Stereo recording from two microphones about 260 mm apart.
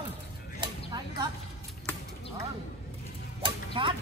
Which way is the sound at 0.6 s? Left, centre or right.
Centre.